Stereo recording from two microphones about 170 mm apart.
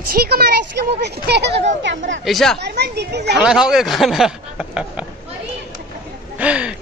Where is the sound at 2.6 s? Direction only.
80° right.